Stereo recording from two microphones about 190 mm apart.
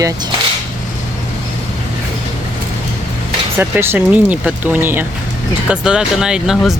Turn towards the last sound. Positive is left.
turn(degrees=-5)  # may be behind; listen again after turning